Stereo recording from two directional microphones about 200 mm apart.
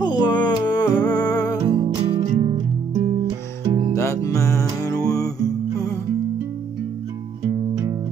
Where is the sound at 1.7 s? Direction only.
25° right (ahead or behind).